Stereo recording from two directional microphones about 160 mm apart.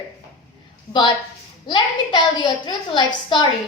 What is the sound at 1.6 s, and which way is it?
A woman's voice, 30° left (ahead or behind).